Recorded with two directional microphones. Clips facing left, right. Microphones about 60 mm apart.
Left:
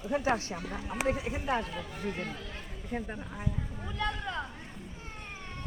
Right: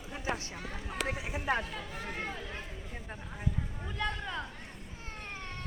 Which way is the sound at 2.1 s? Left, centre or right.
Centre.